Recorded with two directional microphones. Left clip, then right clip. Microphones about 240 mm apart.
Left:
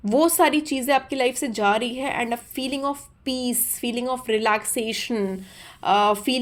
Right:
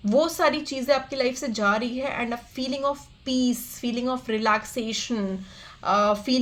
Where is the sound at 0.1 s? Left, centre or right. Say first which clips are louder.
Left 3 dB; left.